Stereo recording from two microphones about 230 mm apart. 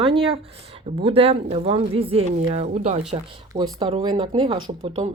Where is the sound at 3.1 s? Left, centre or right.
Centre.